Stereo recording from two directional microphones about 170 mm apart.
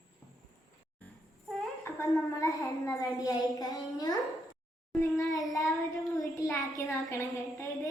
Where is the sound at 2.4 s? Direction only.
20° left (ahead or behind).